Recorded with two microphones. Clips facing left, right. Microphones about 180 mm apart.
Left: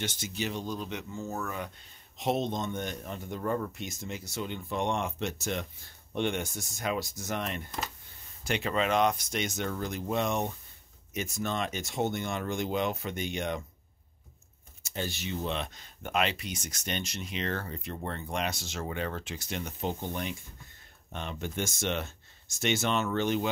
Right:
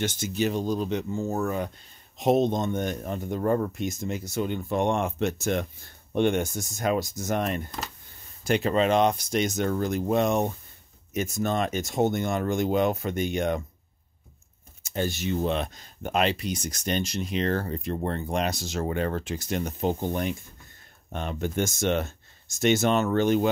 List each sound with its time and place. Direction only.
0.0 s speech: 45° right (ahead or behind)
2.1 s speech: 45° right (ahead or behind)
14.8 s speech: 50° right (ahead or behind)